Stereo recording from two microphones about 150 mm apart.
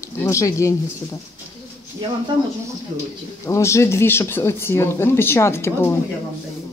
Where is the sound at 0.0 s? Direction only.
20° left (ahead or behind).